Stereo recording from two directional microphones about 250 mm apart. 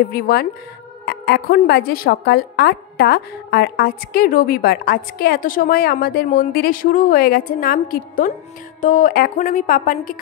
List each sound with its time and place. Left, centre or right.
0.1 s a woman's voice: left